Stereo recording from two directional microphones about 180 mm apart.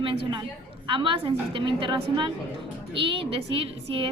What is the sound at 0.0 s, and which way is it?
A woman's voice, 30° right (ahead or behind).